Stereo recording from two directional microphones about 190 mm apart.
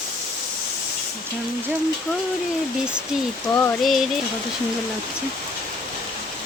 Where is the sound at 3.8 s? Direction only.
Centre (ahead or behind).